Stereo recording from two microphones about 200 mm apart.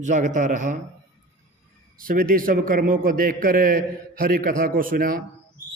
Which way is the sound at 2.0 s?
45° right (ahead or behind).